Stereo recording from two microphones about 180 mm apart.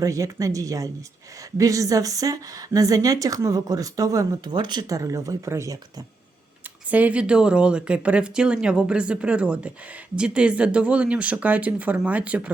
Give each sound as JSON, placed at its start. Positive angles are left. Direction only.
{"t": 0.0, "sound": "speech", "side_deg": -20}
{"t": 6.9, "sound": "speech", "side_deg": -10}